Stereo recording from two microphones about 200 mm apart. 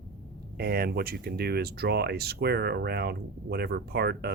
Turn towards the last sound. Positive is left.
turn(degrees=-55)  # may be behind; listen again after turning